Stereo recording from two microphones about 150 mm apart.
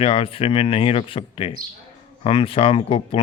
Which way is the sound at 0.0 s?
40° left (ahead or behind).